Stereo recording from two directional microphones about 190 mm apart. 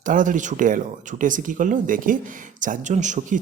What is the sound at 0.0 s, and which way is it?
A man's voice, 45° right (ahead or behind).